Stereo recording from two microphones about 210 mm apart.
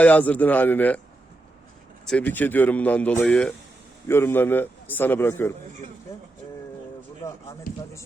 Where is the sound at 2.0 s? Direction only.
5° left (ahead or behind).